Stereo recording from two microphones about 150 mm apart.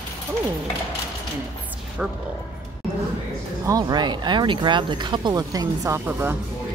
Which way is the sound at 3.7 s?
25° right (ahead or behind).